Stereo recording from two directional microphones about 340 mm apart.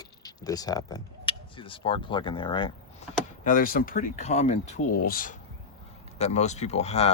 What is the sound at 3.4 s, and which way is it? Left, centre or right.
Speech, left.